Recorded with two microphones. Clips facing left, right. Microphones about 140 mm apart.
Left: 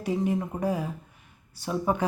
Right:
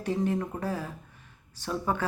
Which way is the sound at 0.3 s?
10° left (ahead or behind).